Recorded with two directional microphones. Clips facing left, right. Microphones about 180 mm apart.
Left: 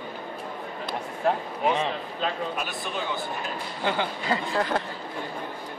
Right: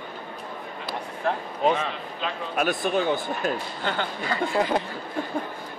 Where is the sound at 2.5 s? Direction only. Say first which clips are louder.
Right 8 dB; 55° right (ahead or behind).